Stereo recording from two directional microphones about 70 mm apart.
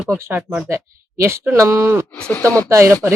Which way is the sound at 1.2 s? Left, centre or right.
Right.